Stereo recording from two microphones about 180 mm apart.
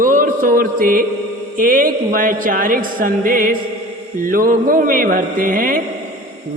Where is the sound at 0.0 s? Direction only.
50° right (ahead or behind).